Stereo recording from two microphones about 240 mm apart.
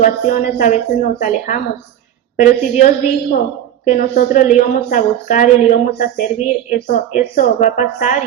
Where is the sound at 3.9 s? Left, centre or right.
Left.